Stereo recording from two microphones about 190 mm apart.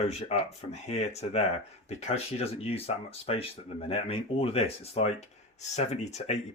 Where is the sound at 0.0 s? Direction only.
35° left (ahead or behind).